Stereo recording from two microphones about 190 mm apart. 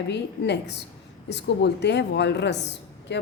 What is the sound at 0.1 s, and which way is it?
A woman's voice, 65° left (ahead or behind).